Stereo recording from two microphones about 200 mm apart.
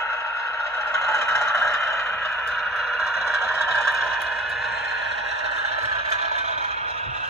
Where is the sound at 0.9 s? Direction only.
15° left (ahead or behind).